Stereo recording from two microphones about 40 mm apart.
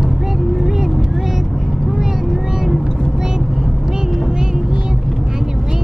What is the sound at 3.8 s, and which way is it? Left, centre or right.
Vehicle, centre.